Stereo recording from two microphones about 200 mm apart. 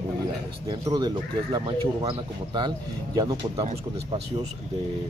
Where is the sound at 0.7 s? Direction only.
20° right (ahead or behind).